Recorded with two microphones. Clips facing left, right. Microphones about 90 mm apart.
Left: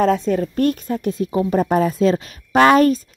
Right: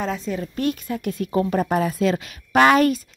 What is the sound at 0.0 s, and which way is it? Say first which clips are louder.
A woman's voice: left 9 dB; 45° left (ahead or behind).